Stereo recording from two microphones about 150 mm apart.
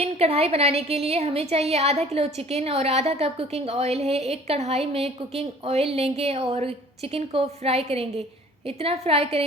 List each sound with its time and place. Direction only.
0.0 s a woman's voice: 40° right (ahead or behind)